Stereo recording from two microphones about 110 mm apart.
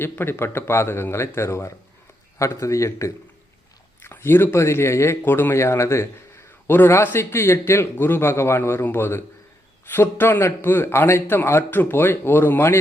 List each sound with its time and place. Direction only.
0.0 s a man's voice: 20° left (ahead or behind)